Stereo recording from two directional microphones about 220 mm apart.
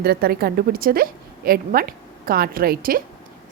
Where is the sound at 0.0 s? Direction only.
45° right (ahead or behind).